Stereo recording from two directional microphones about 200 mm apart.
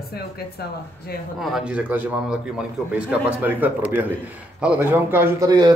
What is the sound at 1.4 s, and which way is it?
A man's voice, 5° right (ahead or behind).